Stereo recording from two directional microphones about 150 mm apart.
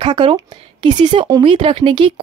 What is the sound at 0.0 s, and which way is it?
A woman's voice, 35° right (ahead or behind).